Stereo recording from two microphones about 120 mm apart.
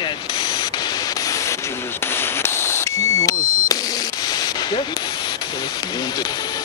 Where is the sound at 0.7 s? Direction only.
35° left (ahead or behind).